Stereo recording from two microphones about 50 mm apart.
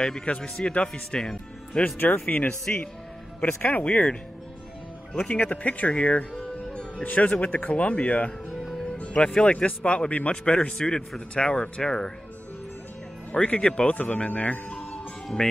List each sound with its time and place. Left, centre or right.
0.0 s speech: left
2.0 s speech: left
6.3 s music: centre
7.0 s speech: left
8.5 s music: centre
8.7 s speech: left
10.8 s speech: centre
11.1 s speech: centre
13.3 s speech: left